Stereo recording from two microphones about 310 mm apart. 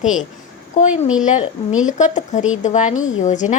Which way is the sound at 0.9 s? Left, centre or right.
Centre.